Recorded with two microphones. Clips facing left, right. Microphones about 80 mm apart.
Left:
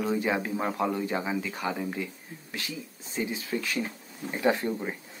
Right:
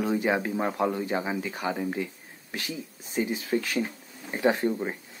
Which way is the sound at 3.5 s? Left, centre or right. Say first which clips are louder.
Right 3 dB; right.